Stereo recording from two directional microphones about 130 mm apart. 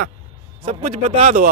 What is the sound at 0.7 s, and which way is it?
Speech, 50° right (ahead or behind).